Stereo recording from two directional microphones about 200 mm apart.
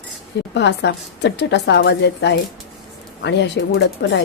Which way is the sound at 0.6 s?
60° left (ahead or behind).